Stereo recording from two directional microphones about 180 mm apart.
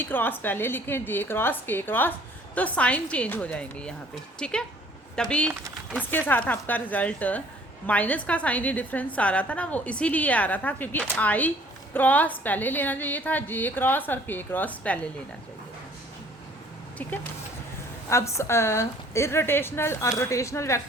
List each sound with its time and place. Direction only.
0.0 s a woman's voice: 10° left (ahead or behind)
17.0 s a woman's voice: 10° left (ahead or behind)